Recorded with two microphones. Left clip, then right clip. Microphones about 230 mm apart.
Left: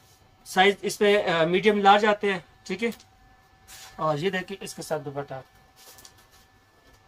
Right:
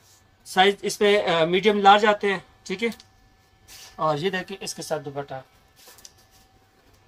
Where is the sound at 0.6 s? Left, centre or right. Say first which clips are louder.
Right 1 dB; centre.